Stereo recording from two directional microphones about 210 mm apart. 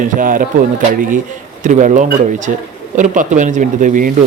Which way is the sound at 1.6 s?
35° right (ahead or behind).